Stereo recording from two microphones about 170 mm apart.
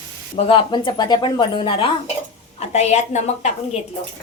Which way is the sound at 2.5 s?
40° left (ahead or behind).